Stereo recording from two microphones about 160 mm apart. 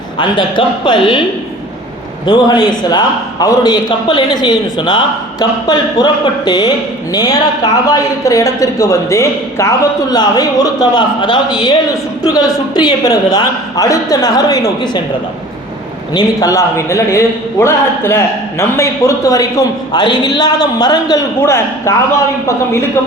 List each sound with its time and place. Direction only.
0.2 s a man's voice: 30° left (ahead or behind)
2.2 s a man's voice: 25° left (ahead or behind)
16.1 s a man's voice: 20° left (ahead or behind)